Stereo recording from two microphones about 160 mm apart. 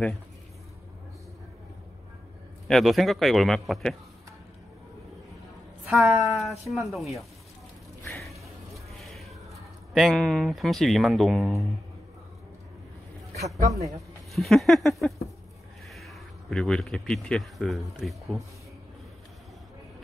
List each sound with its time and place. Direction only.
2.7 s a man's voice: centre (ahead or behind)
5.9 s a woman's voice: centre (ahead or behind)
8.2 s a sound: centre (ahead or behind)
13.7 s speech: 20° right (ahead or behind)
14.3 s a man's voice: centre (ahead or behind)